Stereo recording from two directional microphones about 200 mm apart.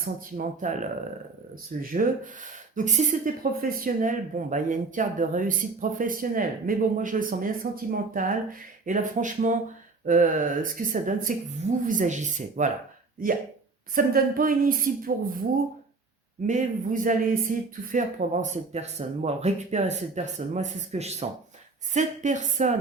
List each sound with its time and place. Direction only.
0.0 s speech: 40° right (ahead or behind)
1.8 s a woman's voice: 45° right (ahead or behind)
13.9 s a woman's voice: 45° right (ahead or behind)
16.5 s speech: 40° right (ahead or behind)